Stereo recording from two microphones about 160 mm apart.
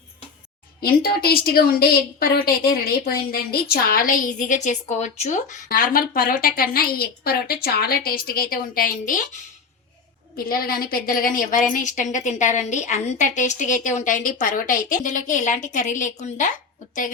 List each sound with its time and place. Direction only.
0.8 s a woman's voice: 70° left (ahead or behind)
10.3 s a woman's voice: 65° left (ahead or behind); by 16.5 s 50° left (ahead or behind)